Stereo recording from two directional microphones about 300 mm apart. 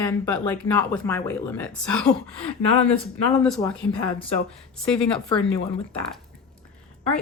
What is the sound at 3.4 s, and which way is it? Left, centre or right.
Speech, centre.